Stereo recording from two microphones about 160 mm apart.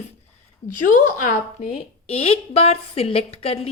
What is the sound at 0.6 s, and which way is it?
A woman's voice, 55° left (ahead or behind).